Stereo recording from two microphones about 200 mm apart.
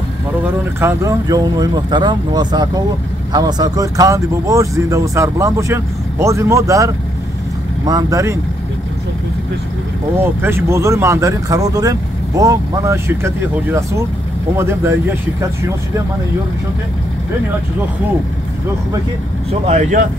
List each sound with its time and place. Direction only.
0.7 s speech: 15° right (ahead or behind)
10.1 s speech: 10° right (ahead or behind)
19.6 s speech: 40° right (ahead or behind)